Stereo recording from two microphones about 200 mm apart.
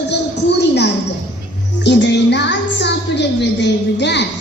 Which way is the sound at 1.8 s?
60° left (ahead or behind).